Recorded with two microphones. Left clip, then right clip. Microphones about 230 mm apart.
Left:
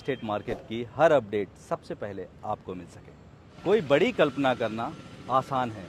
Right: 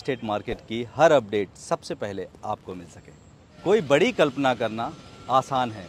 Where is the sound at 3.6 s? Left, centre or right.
Centre.